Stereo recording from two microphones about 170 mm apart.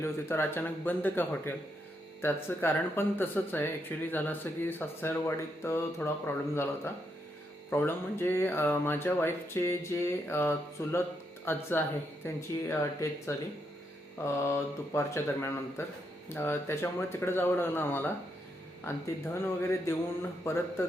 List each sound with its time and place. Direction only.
0.0 s speech: 15° left (ahead or behind)